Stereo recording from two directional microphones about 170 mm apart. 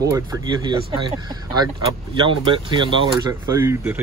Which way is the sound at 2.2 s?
30° right (ahead or behind).